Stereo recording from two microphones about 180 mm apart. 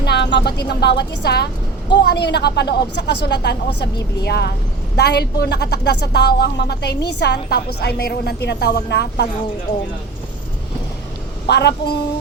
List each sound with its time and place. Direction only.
0.0 s a sound: 70° left (ahead or behind)
0.7 s a woman's voice: 70° left (ahead or behind)
11.4 s a woman's voice: 70° left (ahead or behind)